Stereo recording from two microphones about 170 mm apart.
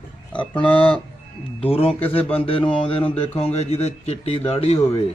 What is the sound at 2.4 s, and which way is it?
Speech, 35° left (ahead or behind).